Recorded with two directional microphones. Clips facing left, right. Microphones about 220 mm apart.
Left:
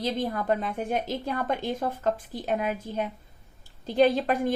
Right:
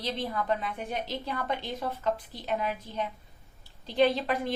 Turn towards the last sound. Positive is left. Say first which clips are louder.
# left 4 dB
turn(degrees=50)  # may be behind; listen again after turning